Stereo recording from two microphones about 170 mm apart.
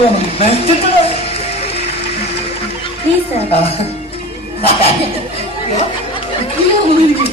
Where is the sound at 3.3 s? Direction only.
35° left (ahead or behind).